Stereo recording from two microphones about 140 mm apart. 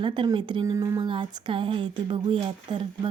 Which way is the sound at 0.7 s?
25° right (ahead or behind).